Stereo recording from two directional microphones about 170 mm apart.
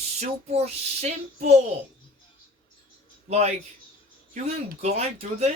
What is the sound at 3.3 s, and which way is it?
Speech, 40° right (ahead or behind).